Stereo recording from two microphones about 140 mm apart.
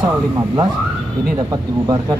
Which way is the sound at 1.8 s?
25° right (ahead or behind).